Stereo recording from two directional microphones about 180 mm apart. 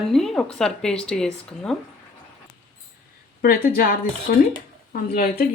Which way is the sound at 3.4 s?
55° left (ahead or behind).